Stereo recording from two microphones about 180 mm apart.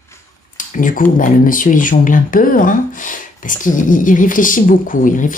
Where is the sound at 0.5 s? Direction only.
45° left (ahead or behind).